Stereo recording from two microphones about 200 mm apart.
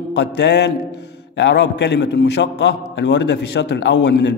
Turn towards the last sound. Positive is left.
turn(degrees=60)  # may be behind; listen again after turning